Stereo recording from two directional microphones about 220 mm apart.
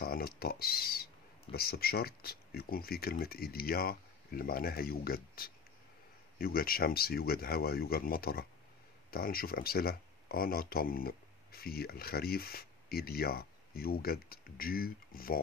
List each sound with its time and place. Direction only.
0.0 s speech: 45° left (ahead or behind)